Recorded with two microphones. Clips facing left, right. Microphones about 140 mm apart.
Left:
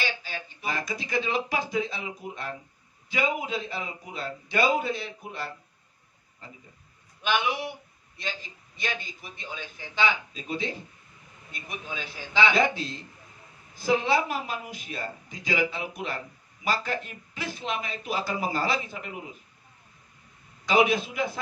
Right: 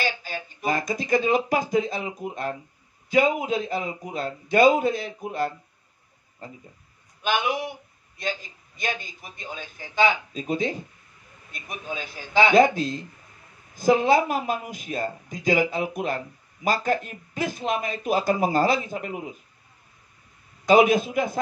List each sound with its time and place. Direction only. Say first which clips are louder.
0.0 s a man's voice: right 4 dB; 45° right (ahead or behind)
7.2 s a man's voice: right 2 dB; 45° right (ahead or behind)
11.9 s a man's voice: right 6 dB; 45° right (ahead or behind)
20.6 s a man's voice: right 6 dB; 45° right (ahead or behind)